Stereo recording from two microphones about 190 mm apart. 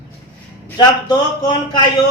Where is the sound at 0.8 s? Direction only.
25° left (ahead or behind).